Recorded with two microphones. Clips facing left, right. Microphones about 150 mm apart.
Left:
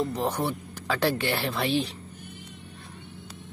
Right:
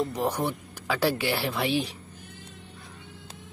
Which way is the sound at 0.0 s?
10° right (ahead or behind).